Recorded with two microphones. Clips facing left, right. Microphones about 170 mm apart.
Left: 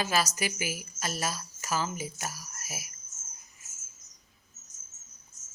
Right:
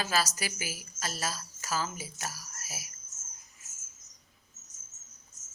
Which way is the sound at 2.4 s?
15° left (ahead or behind).